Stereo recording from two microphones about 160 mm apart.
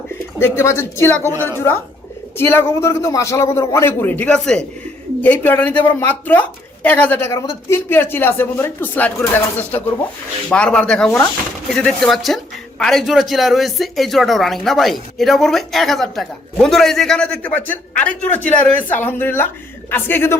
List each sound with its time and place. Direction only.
0.3 s speech: 15° left (ahead or behind)